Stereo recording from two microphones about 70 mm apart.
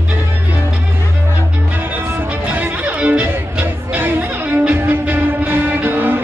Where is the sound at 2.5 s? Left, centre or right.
Right.